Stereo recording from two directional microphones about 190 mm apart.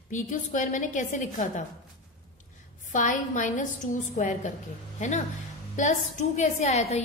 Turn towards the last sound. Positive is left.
turn(degrees=35)  # may be behind; listen again after turning